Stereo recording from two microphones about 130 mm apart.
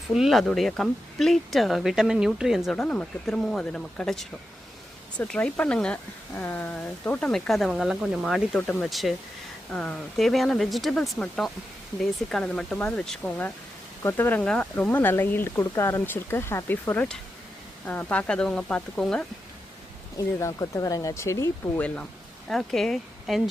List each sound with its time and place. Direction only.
0.1 s speech: centre (ahead or behind)
2.8 s speech: 10° left (ahead or behind)
8.5 s speech: 10° left (ahead or behind)
8.9 s speech: centre (ahead or behind)
20.1 s speech: 25° left (ahead or behind)
21.8 s speech: 10° left (ahead or behind)